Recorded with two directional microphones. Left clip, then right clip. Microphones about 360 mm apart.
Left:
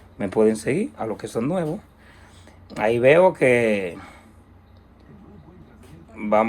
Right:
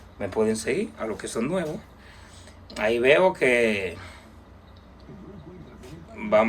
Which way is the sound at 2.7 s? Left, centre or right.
Centre.